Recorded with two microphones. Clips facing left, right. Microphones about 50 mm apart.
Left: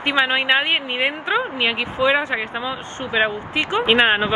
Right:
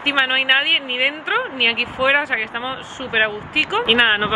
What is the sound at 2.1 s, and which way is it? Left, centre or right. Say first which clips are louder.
Speech: right 2 dB; right.